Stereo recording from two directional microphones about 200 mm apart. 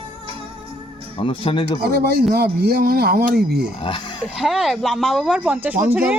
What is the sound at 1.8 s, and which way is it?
Speech, 50° right (ahead or behind).